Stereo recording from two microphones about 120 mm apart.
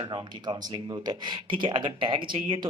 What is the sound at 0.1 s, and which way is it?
Speech, 35° right (ahead or behind).